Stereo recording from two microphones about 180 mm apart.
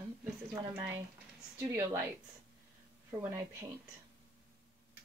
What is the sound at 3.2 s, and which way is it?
Speech, 15° right (ahead or behind).